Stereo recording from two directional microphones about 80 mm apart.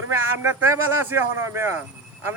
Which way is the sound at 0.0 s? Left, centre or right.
Right.